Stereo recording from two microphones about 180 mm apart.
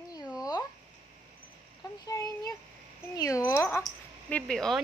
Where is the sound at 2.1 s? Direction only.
20° left (ahead or behind).